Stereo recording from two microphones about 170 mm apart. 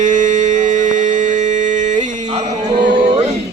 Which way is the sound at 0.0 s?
45° right (ahead or behind).